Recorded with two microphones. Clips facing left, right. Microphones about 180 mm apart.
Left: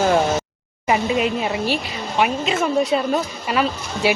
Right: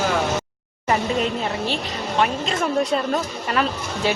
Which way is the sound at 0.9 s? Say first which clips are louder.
Left 2 dB; 10° left (ahead or behind).